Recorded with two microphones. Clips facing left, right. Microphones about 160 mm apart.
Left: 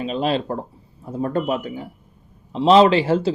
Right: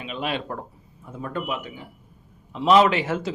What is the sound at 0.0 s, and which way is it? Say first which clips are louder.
Speech: left 7 dB; 35° left (ahead or behind).